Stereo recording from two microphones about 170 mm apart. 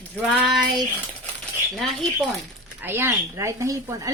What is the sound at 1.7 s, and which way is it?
Speech, centre (ahead or behind).